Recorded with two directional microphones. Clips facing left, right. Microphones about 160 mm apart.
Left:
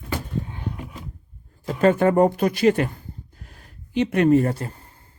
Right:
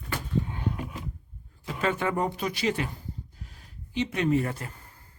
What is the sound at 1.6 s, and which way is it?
Speech, 45° left (ahead or behind).